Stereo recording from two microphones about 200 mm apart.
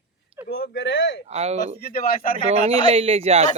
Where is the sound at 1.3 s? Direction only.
30° right (ahead or behind).